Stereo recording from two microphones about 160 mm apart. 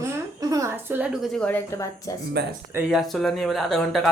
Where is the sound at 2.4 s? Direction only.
90° right.